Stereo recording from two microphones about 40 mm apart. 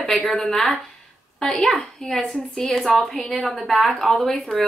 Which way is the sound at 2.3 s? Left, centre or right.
Left.